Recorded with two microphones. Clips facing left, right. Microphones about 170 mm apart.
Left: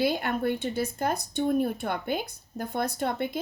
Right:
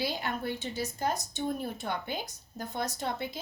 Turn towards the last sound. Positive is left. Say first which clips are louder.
# left 5 dB
turn(degrees=55)  # may be behind; listen again after turning